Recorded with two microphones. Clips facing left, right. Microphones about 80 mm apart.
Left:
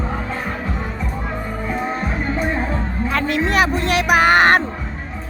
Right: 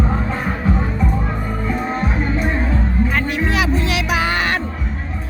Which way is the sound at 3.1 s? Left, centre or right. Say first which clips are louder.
Left 1 dB; left.